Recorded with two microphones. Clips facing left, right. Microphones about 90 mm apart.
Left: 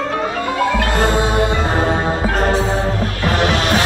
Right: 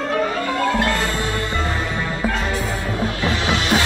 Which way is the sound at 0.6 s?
20° left (ahead or behind).